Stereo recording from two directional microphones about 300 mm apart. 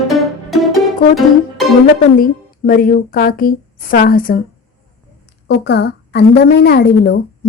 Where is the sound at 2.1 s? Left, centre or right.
Left.